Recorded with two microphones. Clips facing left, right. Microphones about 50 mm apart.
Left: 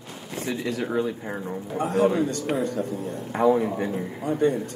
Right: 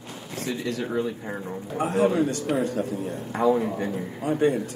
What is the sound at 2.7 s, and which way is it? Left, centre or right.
Speech, right.